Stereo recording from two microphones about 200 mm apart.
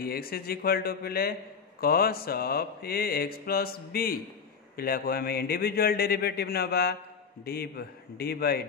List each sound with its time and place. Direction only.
0.0 s mantra: 50° left (ahead or behind)